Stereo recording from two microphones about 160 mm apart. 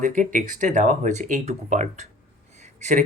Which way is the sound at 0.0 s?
55° right (ahead or behind).